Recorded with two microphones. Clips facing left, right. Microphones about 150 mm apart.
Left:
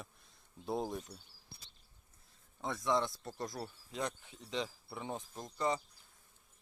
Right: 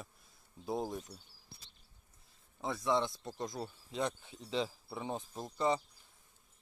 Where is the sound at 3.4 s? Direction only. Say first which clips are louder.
Right 2 dB; 20° right (ahead or behind).